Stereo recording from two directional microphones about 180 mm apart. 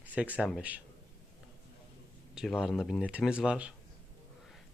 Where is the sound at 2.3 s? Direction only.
Centre (ahead or behind).